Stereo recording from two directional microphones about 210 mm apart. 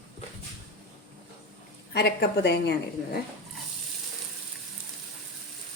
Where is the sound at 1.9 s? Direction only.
50° left (ahead or behind).